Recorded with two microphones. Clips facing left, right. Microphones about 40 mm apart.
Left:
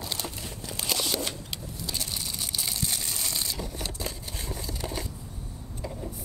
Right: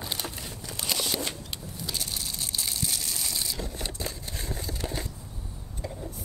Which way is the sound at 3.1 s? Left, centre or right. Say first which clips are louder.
Even; centre.